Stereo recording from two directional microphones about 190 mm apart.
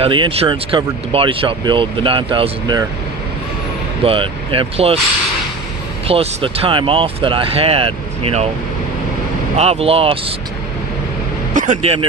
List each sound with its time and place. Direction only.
0.0 s speech: 25° right (ahead or behind)
4.0 s speech: 30° right (ahead or behind)
6.1 s speech: 30° right (ahead or behind)
9.6 s speech: 30° right (ahead or behind)
11.5 s speech: 40° right (ahead or behind)